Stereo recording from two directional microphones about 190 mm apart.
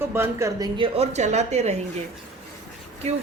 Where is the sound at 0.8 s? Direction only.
35° right (ahead or behind).